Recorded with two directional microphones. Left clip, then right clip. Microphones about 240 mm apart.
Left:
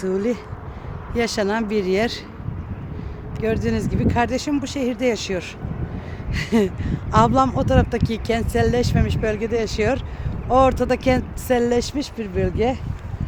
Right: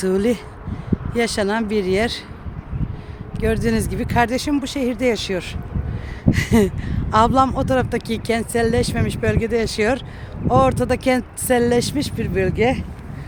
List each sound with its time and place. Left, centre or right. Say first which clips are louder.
0.0 s speech: right 3 dB; right
1.1 s speech: right 1 dB; centre
3.3 s speech: right 2 dB; right